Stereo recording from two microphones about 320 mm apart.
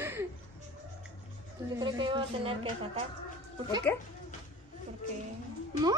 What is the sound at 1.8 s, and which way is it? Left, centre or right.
A woman's voice, centre.